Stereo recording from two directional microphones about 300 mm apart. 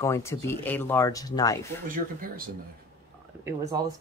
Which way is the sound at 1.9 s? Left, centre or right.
Right.